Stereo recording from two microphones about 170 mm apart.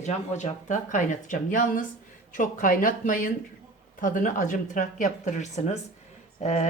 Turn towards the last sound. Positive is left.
turn(degrees=45)  # may be behind; listen again after turning